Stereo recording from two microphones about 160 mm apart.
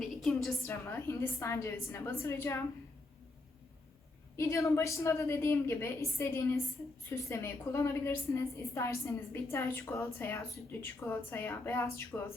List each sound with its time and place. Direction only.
0.0 s a sound: centre (ahead or behind)
0.7 s a woman's voice: 15° left (ahead or behind)
4.4 s a woman's voice: 20° left (ahead or behind)